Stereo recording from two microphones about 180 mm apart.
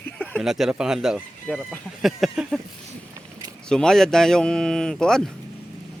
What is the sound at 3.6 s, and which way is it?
Speech, 5° left (ahead or behind).